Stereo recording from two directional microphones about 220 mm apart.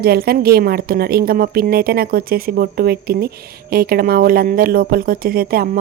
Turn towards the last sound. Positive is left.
turn(degrees=-40)  # may be behind; listen again after turning